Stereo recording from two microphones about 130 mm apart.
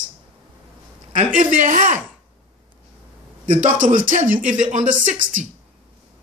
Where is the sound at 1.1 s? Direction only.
85° right.